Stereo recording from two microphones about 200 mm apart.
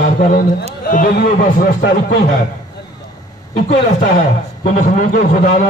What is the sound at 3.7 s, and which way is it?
A man's voice, 40° left (ahead or behind).